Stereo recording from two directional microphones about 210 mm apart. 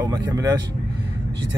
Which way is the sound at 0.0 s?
15° right (ahead or behind).